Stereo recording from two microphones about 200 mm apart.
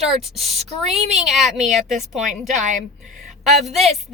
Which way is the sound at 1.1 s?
Centre (ahead or behind).